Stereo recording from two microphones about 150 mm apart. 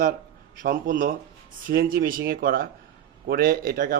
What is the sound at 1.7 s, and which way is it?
A man's voice, 80° right.